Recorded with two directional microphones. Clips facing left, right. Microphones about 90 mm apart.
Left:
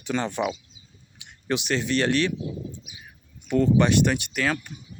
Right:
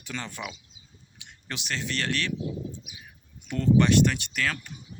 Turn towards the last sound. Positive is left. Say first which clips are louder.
# left 5 dB
turn(degrees=15)  # may be behind; listen again after turning